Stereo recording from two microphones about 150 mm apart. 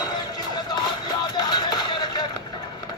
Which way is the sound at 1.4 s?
30° left (ahead or behind).